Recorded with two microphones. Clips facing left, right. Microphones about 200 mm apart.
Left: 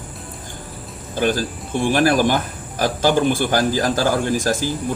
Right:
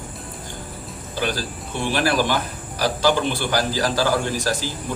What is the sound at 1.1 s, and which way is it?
Speech, 50° left (ahead or behind).